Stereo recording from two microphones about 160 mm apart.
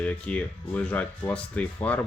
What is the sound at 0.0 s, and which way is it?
Speech, 10° left (ahead or behind).